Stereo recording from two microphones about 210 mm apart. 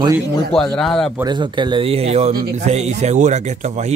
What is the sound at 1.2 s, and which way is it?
Speech, 20° right (ahead or behind).